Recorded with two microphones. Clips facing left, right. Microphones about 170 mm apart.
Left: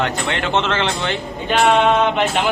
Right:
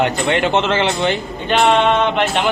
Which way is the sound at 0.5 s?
10° right (ahead or behind).